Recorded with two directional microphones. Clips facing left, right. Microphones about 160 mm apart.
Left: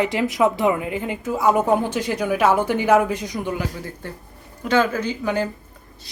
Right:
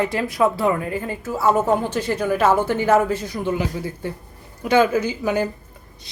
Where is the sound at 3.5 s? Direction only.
10° right (ahead or behind).